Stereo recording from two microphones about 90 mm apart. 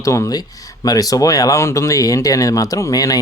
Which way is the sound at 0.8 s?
45° left (ahead or behind).